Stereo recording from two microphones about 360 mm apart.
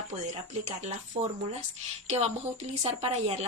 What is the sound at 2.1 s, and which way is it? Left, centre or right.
A woman's voice, centre.